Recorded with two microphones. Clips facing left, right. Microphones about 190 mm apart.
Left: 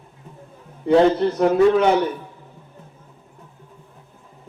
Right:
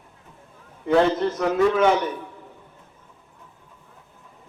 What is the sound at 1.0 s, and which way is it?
Speech, 35° left (ahead or behind).